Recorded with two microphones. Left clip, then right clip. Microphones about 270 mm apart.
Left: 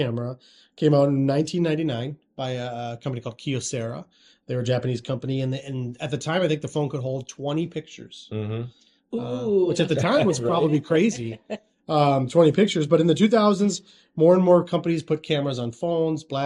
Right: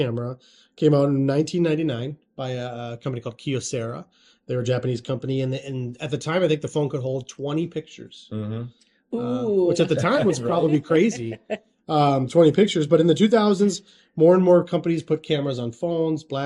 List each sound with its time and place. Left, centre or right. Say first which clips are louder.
0.0 s speech: right 1 dB; centre
8.3 s speech: left 2 dB; left
9.1 s speech: right 1 dB; centre
11.3 s a man's voice: right 4 dB; right
11.9 s speech: even; centre